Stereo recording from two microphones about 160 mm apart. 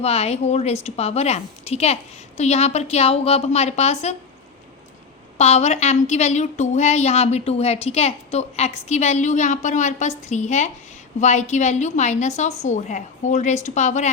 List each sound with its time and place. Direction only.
0.0 s a woman's voice: 40° left (ahead or behind)
5.4 s a woman's voice: 45° left (ahead or behind)